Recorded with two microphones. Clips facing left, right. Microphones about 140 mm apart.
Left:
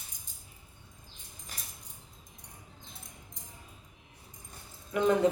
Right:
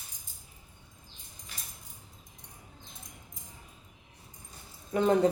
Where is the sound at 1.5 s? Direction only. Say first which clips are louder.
Left 1 dB; 40° left (ahead or behind).